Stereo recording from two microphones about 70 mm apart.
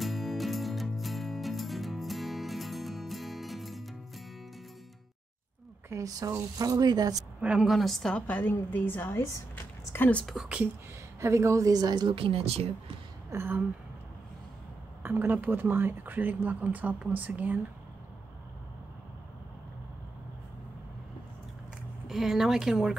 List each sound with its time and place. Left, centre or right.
0.0 s music: centre
5.9 s speech: right
6.6 s speech: right
7.3 s a woman's voice: centre
7.6 s a woman's voice: centre
8.1 s a woman's voice: left
10.3 s speech: centre
11.1 s a woman's voice: right
13.3 s speech: right
15.0 s speech: right
22.0 s speech: centre